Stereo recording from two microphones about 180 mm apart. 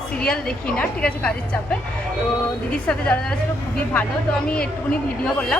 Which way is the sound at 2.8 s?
5° left (ahead or behind).